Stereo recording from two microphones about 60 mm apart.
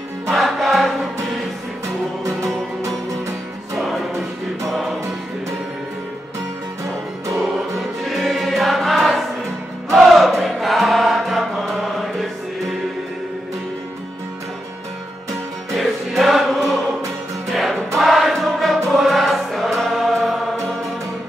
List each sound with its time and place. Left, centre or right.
0.3 s music: centre
2.2 s music: right
7.7 s music: centre
15.7 s music: centre
19.8 s choir: centre